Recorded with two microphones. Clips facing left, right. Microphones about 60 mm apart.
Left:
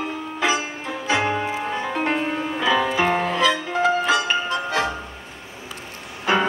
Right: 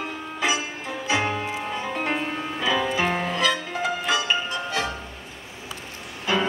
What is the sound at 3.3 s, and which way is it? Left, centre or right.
Music, left.